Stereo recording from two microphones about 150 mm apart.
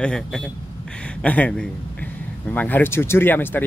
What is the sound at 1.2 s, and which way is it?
Speech, 10° left (ahead or behind).